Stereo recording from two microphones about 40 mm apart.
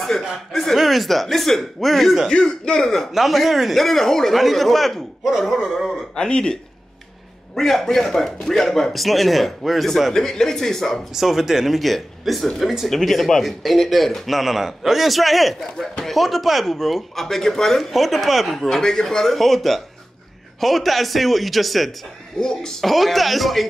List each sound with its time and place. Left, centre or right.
0.5 s speech: centre
2.3 s speech: left
3.1 s speech: centre
6.1 s speech: left
7.5 s speech: centre
10.1 s speech: centre
11.1 s speech: centre
22.4 s speech: centre